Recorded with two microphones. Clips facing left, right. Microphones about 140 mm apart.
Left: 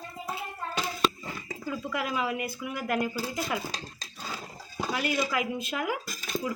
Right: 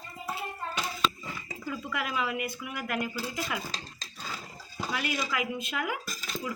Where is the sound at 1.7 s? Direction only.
30° left (ahead or behind).